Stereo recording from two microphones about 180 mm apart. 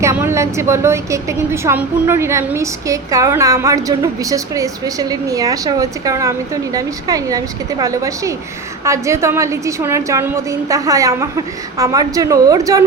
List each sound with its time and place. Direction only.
0.0 s a woman's voice: 15° right (ahead or behind)